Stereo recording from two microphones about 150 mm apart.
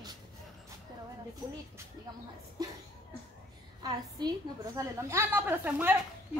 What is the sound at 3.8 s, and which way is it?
A woman's voice, 25° right (ahead or behind).